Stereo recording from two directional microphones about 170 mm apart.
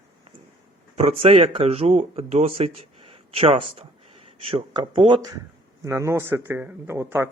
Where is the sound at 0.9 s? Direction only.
35° right (ahead or behind).